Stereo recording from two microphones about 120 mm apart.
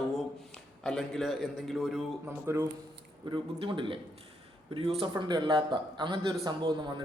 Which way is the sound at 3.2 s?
45° right (ahead or behind).